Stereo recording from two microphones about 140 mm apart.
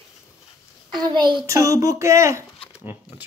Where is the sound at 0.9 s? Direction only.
30° right (ahead or behind).